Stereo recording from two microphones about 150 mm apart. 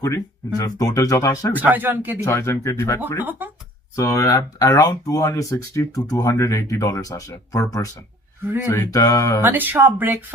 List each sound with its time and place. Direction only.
0.0 s speech: 25° left (ahead or behind)
1.5 s speech: 10° right (ahead or behind)
2.2 s speech: 20° left (ahead or behind)
3.2 s speech: 10° right (ahead or behind)
3.9 s speech: 20° left (ahead or behind)
9.4 s speech: 10° right (ahead or behind)